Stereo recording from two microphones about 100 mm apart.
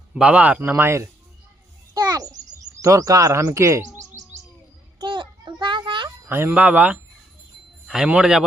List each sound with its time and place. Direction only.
0.1 s speech: 10° right (ahead or behind)
0.6 s speech: 25° right (ahead or behind)
1.9 s a sound: 40° right (ahead or behind)
2.8 s speech: 35° right (ahead or behind)
4.9 s a sound: 50° right (ahead or behind)
6.2 s a man's voice: 20° right (ahead or behind); by 8.4 s 5° right (ahead or behind)